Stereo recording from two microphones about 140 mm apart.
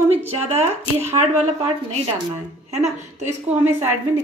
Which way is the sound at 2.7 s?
55° right (ahead or behind).